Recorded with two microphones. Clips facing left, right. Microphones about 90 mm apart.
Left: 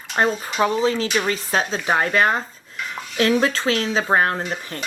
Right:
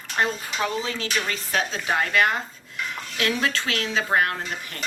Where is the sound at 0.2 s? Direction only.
35° left (ahead or behind).